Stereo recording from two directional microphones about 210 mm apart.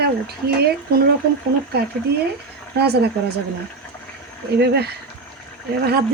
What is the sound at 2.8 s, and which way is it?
Speech, 50° right (ahead or behind).